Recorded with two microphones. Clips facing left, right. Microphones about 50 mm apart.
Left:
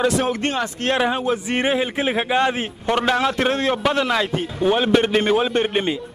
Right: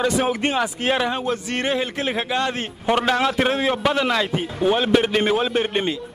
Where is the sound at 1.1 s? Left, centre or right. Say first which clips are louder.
Left 3 dB; centre.